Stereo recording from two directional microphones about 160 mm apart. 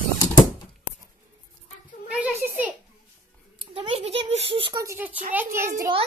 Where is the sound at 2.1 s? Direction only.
10° right (ahead or behind).